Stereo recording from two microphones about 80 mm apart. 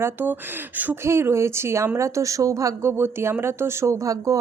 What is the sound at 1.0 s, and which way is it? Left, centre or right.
Speech, right.